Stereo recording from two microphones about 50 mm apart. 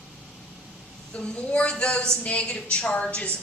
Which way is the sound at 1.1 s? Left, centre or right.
Centre.